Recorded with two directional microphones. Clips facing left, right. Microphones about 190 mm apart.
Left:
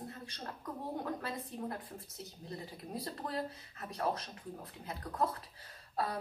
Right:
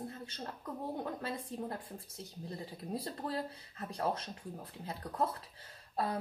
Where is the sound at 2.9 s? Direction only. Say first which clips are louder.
Right 1 dB; 30° right (ahead or behind).